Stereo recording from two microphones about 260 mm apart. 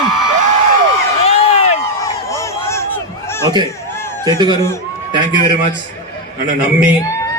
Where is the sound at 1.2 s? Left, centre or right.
Left.